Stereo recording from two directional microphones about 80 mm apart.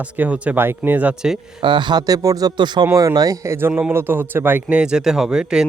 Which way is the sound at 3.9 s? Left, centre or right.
Right.